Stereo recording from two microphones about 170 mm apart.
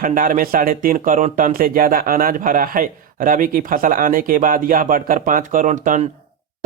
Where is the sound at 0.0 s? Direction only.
55° right (ahead or behind).